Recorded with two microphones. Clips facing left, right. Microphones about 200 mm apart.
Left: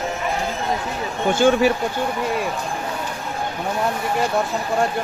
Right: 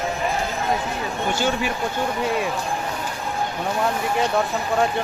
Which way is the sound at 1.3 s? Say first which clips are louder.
Left 10 dB; 50° left (ahead or behind).